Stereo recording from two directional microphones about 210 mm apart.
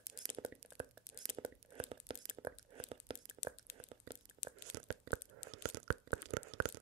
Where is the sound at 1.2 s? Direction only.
25° right (ahead or behind).